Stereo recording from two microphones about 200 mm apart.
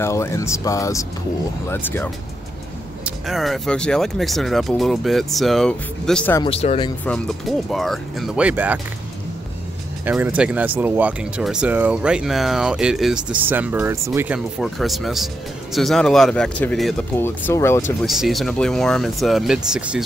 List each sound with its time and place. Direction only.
0.0 s speech: 15° left (ahead or behind)
3.3 s speech: centre (ahead or behind)
6.4 s speech: 30° left (ahead or behind)
7.1 s speech: centre (ahead or behind)
10.0 s speech: 10° right (ahead or behind); by 17.9 s 15° left (ahead or behind)
18.0 s speech: centre (ahead or behind)